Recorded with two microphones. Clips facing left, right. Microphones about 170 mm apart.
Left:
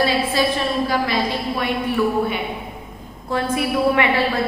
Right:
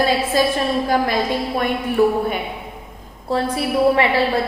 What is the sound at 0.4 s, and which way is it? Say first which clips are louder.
A woman's voice: right 2 dB; 45° right (ahead or behind).